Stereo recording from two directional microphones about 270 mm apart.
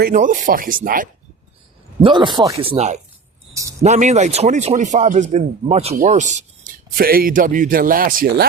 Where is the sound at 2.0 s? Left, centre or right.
Centre.